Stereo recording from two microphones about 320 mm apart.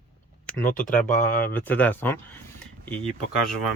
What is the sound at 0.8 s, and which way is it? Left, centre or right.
Speech, left.